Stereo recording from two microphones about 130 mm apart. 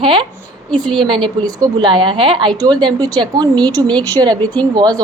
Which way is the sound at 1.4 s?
35° right (ahead or behind).